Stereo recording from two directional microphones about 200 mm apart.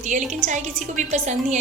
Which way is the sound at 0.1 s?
40° right (ahead or behind).